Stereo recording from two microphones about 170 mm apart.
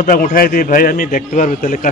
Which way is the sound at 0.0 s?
55° left (ahead or behind).